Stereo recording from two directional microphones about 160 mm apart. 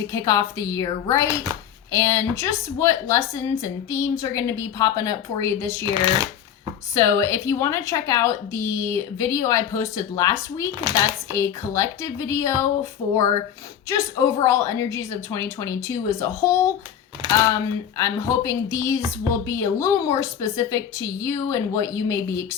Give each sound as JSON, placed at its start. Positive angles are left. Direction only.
{"t": 0.1, "sound": "a woman's voice", "side_deg": 20}
{"t": 5.8, "sound": "speech", "side_deg": -25}
{"t": 6.9, "sound": "a woman's voice", "side_deg": 20}
{"t": 17.2, "sound": "speech", "side_deg": -30}
{"t": 17.9, "sound": "a woman's voice", "side_deg": 20}